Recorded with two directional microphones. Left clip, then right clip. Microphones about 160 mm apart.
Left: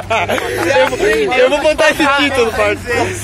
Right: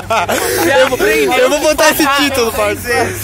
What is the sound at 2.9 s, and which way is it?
Speech, 60° right (ahead or behind).